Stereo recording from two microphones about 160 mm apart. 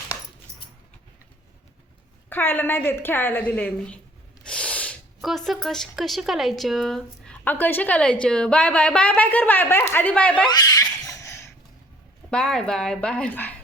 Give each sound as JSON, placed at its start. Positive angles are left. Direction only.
{"t": 2.3, "sound": "speech", "side_deg": 10}
{"t": 10.4, "sound": "speech", "side_deg": 25}
{"t": 11.2, "sound": "a sound", "side_deg": 15}
{"t": 12.3, "sound": "speech", "side_deg": 5}